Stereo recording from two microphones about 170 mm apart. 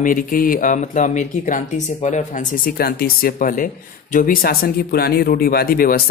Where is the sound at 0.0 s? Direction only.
55° left (ahead or behind).